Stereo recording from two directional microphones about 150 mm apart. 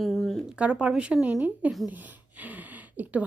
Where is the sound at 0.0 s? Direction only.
Centre (ahead or behind).